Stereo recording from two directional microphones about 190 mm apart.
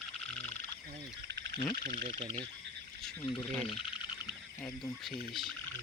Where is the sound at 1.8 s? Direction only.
50° right (ahead or behind).